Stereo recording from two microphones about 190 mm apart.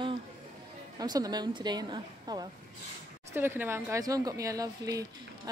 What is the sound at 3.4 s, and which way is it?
A woman's voice, 10° right (ahead or behind).